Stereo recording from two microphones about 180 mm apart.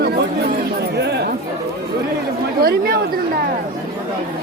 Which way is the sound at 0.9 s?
65° right (ahead or behind).